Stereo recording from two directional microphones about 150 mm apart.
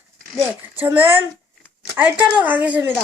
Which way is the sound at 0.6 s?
15° right (ahead or behind).